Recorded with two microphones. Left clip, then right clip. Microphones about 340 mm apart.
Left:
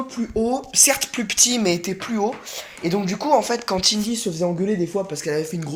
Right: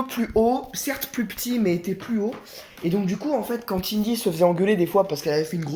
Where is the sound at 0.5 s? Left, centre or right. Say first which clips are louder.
Left 7 dB; centre.